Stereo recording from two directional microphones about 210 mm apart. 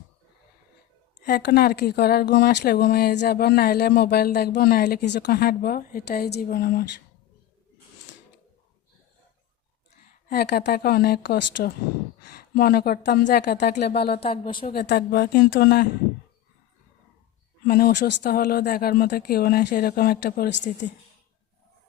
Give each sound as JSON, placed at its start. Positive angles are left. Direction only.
{"t": 1.2, "sound": "speech", "side_deg": 50}
{"t": 10.2, "sound": "speech", "side_deg": 50}
{"t": 14.2, "sound": "a woman's voice", "side_deg": 25}
{"t": 14.7, "sound": "speech", "side_deg": 50}
{"t": 17.7, "sound": "speech", "side_deg": 45}